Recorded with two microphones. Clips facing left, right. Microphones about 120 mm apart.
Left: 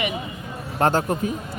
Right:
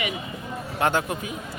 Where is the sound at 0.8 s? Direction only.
40° left (ahead or behind).